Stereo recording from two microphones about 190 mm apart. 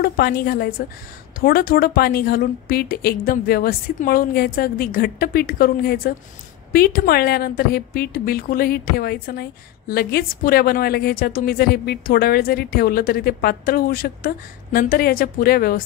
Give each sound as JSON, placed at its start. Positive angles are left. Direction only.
{"t": 0.0, "sound": "a woman's voice", "side_deg": 50}